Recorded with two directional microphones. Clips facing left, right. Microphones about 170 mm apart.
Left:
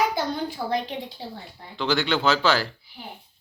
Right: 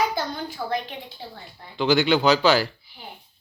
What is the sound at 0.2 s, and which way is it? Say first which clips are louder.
Speech: left 2 dB; 30° left (ahead or behind).